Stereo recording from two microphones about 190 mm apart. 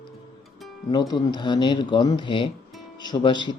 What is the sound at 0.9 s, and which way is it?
Speech, 25° left (ahead or behind).